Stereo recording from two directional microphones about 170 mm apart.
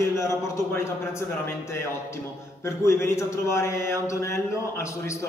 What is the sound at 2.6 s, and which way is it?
Speech, 15° left (ahead or behind).